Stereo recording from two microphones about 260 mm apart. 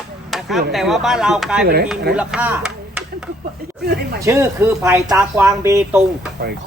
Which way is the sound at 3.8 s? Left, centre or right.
Right.